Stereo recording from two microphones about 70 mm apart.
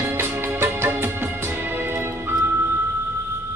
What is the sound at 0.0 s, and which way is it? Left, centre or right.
Music, right.